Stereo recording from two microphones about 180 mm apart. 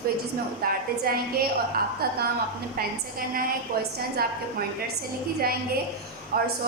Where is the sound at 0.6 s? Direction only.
55° right (ahead or behind).